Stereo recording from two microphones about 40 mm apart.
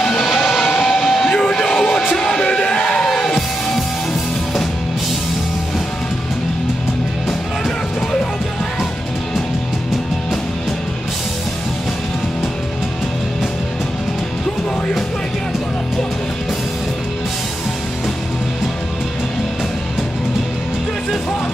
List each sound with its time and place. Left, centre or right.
0.2 s music: centre
3.0 s music: centre